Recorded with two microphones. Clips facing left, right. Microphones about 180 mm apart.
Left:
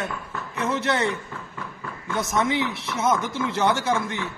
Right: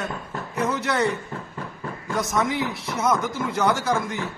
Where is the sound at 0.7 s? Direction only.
25° left (ahead or behind).